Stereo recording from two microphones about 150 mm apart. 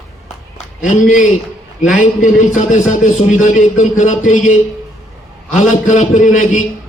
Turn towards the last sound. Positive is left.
turn(degrees=55)  # may be behind; listen again after turning